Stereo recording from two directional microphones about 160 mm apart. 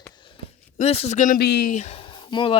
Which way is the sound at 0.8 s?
40° left (ahead or behind).